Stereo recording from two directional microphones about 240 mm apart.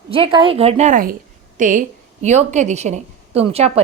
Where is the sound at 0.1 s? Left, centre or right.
Right.